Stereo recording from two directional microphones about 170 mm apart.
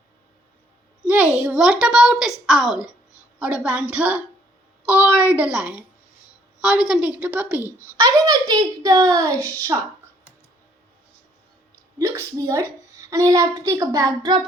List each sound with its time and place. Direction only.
1.0 s a sound: 10° right (ahead or behind)
1.4 s a woman's voice: 5° right (ahead or behind)
7.9 s a child's voice: 20° right (ahead or behind)
11.9 s a child's voice: 20° right (ahead or behind)